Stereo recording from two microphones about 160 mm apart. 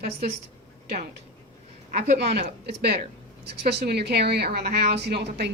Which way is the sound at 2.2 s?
90° right.